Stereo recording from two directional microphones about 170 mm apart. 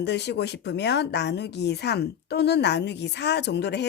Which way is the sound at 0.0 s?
90° left.